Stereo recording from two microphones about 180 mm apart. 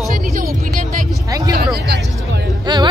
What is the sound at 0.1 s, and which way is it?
Music, 50° right (ahead or behind).